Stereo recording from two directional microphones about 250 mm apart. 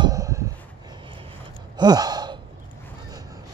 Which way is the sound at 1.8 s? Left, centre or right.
Centre.